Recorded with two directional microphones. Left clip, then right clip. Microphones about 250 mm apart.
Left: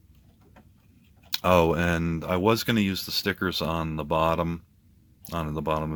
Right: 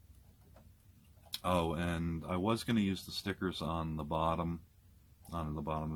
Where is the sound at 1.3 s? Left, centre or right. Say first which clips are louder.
Left 13 dB; left.